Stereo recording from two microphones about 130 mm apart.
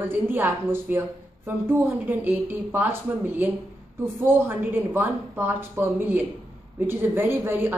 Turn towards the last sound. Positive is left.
turn(degrees=-15)  # may be behind; listen again after turning